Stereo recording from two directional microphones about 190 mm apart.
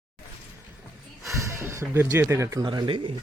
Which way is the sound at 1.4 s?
15° right (ahead or behind).